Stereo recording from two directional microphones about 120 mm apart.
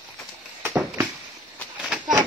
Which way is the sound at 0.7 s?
15° right (ahead or behind).